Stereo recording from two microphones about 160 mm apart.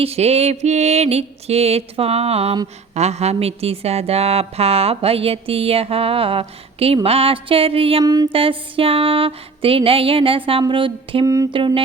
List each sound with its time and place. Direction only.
0.0 s speech: 40° right (ahead or behind)
8.0 s music: 20° right (ahead or behind)
8.3 s speech: 35° right (ahead or behind)